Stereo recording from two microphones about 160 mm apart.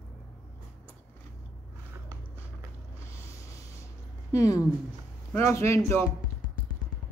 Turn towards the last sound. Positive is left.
turn(degrees=15)  # may be behind; listen again after turning